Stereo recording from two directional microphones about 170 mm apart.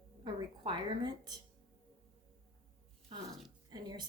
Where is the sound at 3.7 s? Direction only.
25° right (ahead or behind).